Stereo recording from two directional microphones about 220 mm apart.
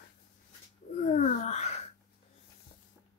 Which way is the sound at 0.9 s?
35° left (ahead or behind).